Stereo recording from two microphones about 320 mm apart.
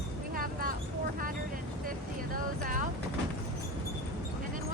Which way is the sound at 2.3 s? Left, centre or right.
Right.